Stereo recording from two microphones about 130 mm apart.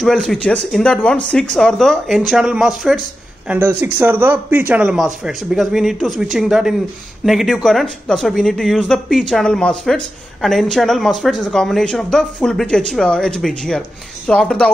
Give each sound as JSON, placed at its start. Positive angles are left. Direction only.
{"t": 0.0, "sound": "speech", "side_deg": 0}
{"t": 3.4, "sound": "speech", "side_deg": -20}